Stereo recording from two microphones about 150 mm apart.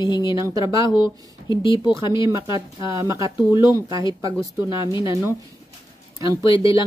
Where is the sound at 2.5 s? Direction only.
20° right (ahead or behind).